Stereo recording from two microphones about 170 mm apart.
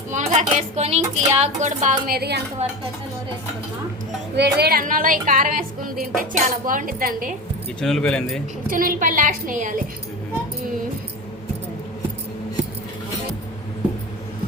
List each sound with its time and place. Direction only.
0.1 s a woman's voice: 45° right (ahead or behind)
2.1 s a woman's voice: 70° right (ahead or behind)
4.4 s a woman's voice: 70° right (ahead or behind)
7.8 s speech: 5° left (ahead or behind)
8.7 s a woman's voice: 55° right (ahead or behind)